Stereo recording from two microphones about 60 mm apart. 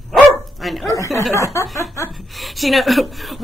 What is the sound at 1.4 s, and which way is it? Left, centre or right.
Speech, left.